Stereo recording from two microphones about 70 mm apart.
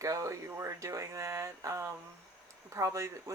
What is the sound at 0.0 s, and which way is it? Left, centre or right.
Speech, right.